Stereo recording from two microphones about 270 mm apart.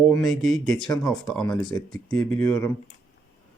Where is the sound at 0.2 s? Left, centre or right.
Centre.